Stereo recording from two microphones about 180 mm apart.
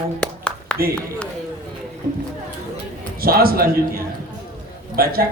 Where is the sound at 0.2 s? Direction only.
5° left (ahead or behind).